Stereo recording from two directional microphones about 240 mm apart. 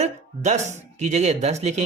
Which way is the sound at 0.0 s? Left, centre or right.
Right.